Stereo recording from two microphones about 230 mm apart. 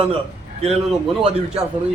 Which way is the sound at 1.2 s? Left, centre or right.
Right.